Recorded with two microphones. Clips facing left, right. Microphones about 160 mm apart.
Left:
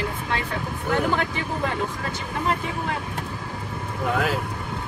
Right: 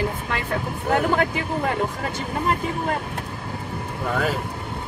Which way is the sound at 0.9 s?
45° right (ahead or behind).